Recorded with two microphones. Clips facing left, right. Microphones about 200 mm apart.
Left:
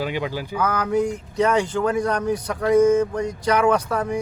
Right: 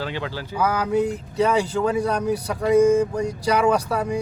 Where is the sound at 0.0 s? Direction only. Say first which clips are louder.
Left 3 dB; 15° left (ahead or behind).